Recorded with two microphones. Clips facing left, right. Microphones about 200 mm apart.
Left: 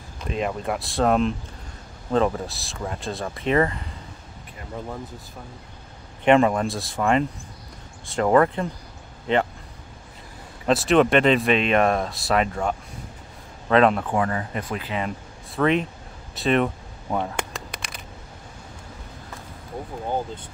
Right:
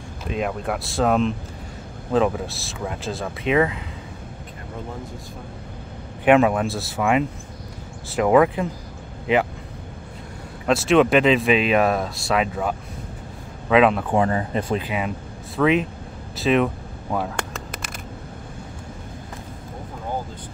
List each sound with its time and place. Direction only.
0.2 s speech: centre (ahead or behind)
6.2 s speech: 5° right (ahead or behind)
10.7 s speech: centre (ahead or behind)
14.1 s speech: 25° right (ahead or behind)
15.5 s speech: centre (ahead or behind)
17.5 s a sound: centre (ahead or behind)